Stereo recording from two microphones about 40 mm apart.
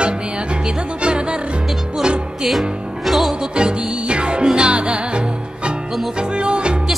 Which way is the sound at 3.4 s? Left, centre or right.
Right.